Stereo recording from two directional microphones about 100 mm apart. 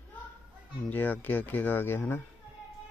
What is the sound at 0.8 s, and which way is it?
Speech, 15° left (ahead or behind).